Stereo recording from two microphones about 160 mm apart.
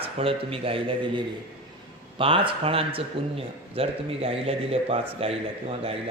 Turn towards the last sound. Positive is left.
turn(degrees=-35)  # may be behind; listen again after turning